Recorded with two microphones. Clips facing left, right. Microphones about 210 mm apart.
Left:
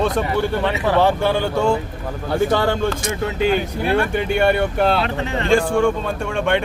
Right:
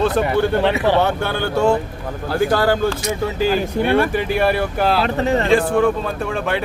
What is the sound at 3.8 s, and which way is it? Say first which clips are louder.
Speech: even; centre (ahead or behind).